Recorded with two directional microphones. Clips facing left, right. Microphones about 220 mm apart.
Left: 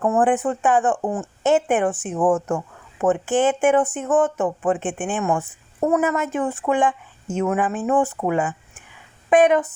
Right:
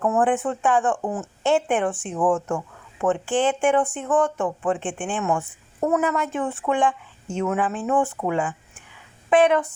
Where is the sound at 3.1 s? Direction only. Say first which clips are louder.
Left 3 dB; 5° left (ahead or behind).